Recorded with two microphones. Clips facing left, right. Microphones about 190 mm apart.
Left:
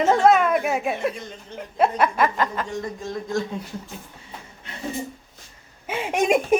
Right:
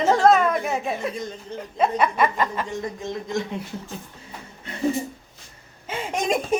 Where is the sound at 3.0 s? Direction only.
20° right (ahead or behind).